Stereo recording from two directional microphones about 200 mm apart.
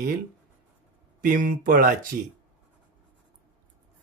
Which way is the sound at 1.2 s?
45° right (ahead or behind).